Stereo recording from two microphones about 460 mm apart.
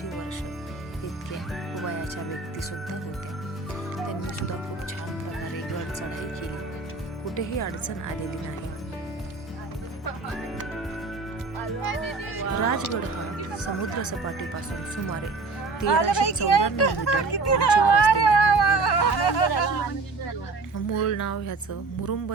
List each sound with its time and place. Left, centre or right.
7.3 s speech: left
11.8 s speech: left
12.4 s speech: left
13.9 s speech: left
15.9 s speech: left
18.7 s a sound: left
20.7 s speech: left